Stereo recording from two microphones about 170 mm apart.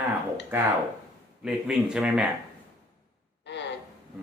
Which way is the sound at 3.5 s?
90° left.